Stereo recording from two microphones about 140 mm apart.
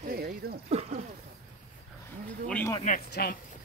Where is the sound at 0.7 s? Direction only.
50° right (ahead or behind).